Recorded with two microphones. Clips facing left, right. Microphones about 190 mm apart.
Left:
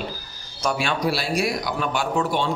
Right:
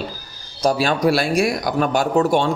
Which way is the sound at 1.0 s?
50° right (ahead or behind).